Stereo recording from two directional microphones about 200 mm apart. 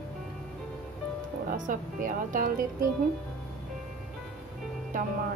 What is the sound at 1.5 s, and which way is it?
Speech, 40° right (ahead or behind).